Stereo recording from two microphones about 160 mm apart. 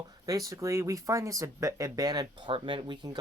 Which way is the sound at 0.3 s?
20° right (ahead or behind).